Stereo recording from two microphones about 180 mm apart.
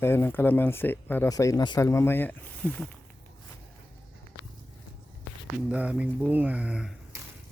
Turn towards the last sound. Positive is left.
turn(degrees=-5)  # may be behind; listen again after turning